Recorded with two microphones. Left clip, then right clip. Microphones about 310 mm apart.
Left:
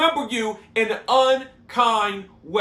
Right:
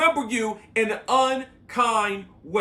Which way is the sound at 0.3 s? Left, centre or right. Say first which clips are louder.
Left 1 dB; centre.